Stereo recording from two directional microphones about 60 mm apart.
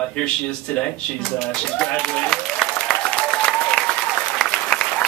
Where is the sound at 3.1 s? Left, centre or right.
Centre.